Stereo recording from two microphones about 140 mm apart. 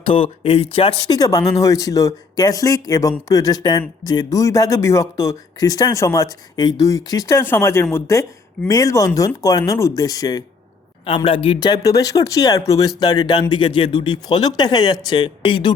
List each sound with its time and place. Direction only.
0.0 s speech: 40° left (ahead or behind)
1.1 s speech: 25° left (ahead or behind)
11.0 s speech: 40° left (ahead or behind)